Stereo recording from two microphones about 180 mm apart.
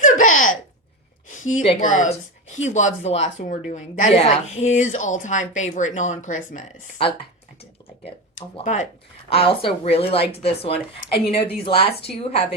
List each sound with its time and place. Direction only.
0.0 s a sound: 45° left (ahead or behind)
1.8 s speech: 45° left (ahead or behind)
7.0 s speech: 30° left (ahead or behind)